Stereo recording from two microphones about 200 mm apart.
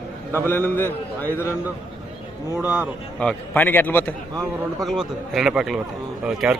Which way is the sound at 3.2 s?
5° left (ahead or behind).